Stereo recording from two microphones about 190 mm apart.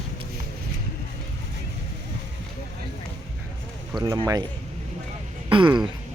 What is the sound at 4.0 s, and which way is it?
Speech, 20° right (ahead or behind).